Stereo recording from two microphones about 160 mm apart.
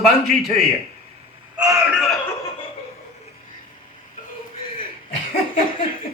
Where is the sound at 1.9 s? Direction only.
Centre (ahead or behind).